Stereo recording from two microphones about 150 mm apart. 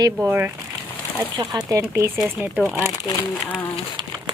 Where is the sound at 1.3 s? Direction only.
25° right (ahead or behind).